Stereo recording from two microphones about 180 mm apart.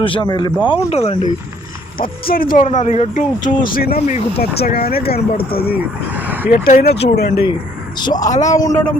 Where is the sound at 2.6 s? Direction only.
40° left (ahead or behind); by 5.2 s 60° left (ahead or behind).